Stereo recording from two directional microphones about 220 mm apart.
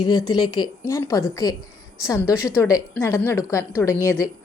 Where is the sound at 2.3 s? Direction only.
5° right (ahead or behind).